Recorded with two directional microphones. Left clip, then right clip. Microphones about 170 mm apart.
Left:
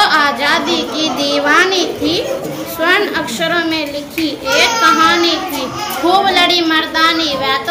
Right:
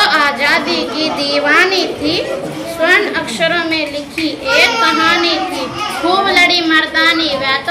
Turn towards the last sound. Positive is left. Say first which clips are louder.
# even
turn(degrees=35)  # may be behind; listen again after turning